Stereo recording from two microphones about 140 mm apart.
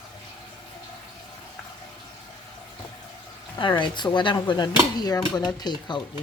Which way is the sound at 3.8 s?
35° left (ahead or behind).